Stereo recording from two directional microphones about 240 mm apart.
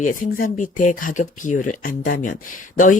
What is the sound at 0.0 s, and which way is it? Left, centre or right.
Speech, left.